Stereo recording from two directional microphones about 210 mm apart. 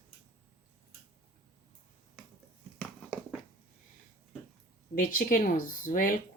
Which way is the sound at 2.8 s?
5° left (ahead or behind).